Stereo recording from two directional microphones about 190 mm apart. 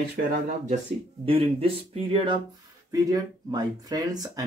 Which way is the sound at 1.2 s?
30° right (ahead or behind).